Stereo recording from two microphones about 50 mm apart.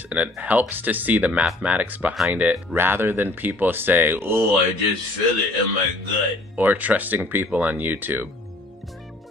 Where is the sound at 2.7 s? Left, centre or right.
Right.